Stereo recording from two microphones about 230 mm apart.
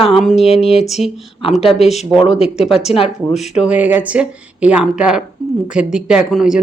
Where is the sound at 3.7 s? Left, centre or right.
Centre.